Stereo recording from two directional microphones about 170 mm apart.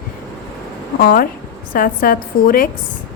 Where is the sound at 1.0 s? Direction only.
55° left (ahead or behind).